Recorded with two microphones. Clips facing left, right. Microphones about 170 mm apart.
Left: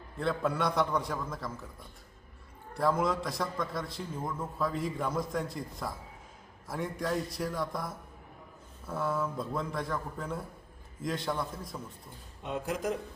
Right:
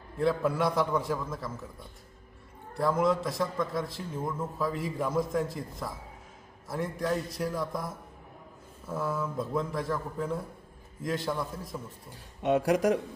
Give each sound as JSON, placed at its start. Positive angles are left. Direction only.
{"t": 0.2, "sound": "a man's voice", "side_deg": -5}
{"t": 2.7, "sound": "a man's voice", "side_deg": 0}
{"t": 8.9, "sound": "a man's voice", "side_deg": -10}
{"t": 12.1, "sound": "speech", "side_deg": -75}